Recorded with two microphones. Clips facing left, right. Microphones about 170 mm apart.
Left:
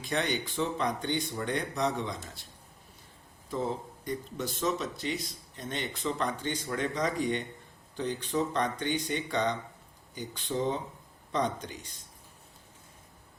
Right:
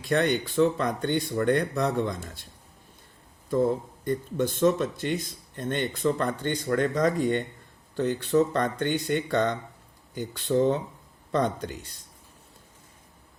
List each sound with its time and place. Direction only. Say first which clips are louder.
0.4 s speech: right 7 dB; 65° right (ahead or behind)
3.5 s speech: right 9 dB; 55° right (ahead or behind)